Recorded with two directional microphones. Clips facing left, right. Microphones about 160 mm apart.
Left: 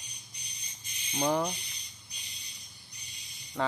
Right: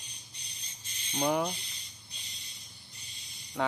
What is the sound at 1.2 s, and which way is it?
Speech, 5° right (ahead or behind).